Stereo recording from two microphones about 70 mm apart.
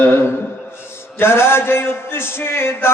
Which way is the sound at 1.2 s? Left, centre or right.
Left.